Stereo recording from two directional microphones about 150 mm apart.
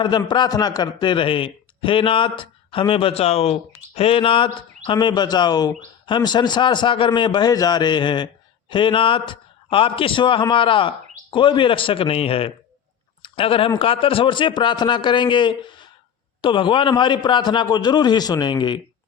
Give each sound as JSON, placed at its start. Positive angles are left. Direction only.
{"t": 0.0, "sound": "a man's voice", "side_deg": 30}